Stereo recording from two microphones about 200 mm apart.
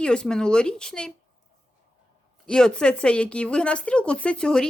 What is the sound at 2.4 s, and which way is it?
Speech, 5° left (ahead or behind).